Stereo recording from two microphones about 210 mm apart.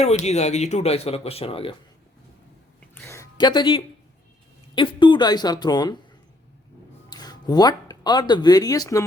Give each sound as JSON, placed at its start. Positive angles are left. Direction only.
{"t": 0.0, "sound": "speech", "side_deg": 30}
{"t": 2.9, "sound": "speech", "side_deg": 10}
{"t": 7.1, "sound": "speech", "side_deg": 20}